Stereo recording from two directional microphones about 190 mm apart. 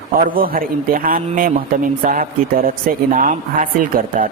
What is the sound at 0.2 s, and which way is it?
Speech, 45° right (ahead or behind).